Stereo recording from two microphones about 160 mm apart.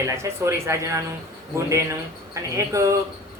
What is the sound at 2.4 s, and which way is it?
Speech, 20° right (ahead or behind).